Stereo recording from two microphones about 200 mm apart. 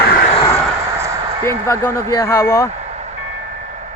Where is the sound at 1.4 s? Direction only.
15° left (ahead or behind).